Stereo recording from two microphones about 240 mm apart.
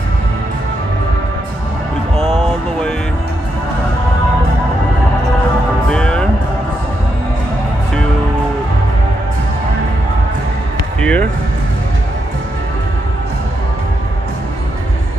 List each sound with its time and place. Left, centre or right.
5.9 s music: centre
11.0 s music: centre